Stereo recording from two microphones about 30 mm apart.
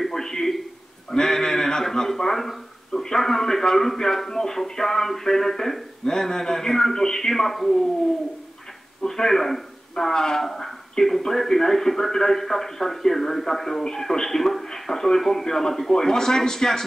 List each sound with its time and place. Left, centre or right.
0.0 s a sound: centre
3.2 s a man's voice: centre
9.0 s speech: left
9.3 s a man's voice: centre
10.1 s a man's voice: centre